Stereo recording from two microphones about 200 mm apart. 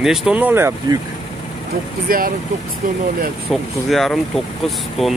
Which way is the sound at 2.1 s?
45° right (ahead or behind).